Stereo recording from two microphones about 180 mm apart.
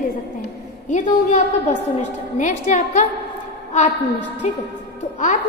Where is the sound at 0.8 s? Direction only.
45° left (ahead or behind).